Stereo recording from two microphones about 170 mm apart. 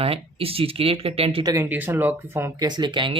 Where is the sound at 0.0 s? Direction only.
35° right (ahead or behind).